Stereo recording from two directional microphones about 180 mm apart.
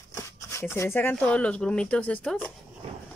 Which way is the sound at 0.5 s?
15° left (ahead or behind).